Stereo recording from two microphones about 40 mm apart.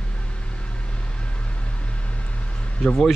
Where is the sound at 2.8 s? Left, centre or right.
Centre.